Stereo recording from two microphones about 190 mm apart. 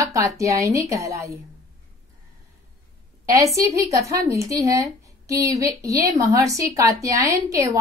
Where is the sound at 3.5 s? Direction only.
15° right (ahead or behind).